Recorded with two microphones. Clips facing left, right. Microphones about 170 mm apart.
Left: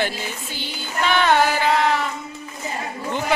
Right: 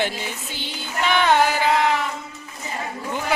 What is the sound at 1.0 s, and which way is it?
Music, 15° right (ahead or behind).